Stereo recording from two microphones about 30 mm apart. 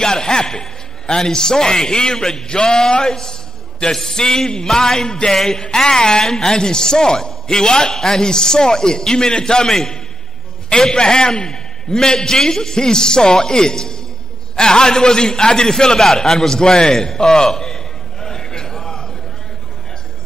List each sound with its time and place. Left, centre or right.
0.0 s a man's voice: left
16.0 s a man's voice: centre
17.2 s a man's voice: left
17.6 s a sound: left